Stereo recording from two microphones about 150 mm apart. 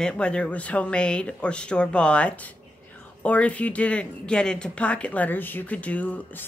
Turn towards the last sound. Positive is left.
turn(degrees=10)  # may be behind; listen again after turning